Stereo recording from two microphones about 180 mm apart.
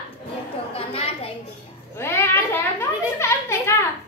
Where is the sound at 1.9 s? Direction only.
15° left (ahead or behind).